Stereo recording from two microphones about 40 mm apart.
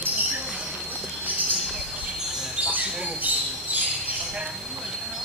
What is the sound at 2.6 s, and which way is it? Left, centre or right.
Squawk, right.